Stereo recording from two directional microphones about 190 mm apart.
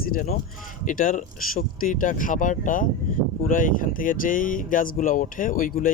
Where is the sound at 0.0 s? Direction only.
50° left (ahead or behind).